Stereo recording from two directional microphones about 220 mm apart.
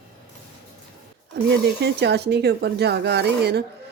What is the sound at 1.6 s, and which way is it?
Speech, 50° right (ahead or behind).